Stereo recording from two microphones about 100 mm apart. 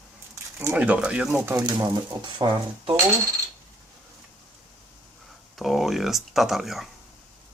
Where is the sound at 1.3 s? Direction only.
20° right (ahead or behind).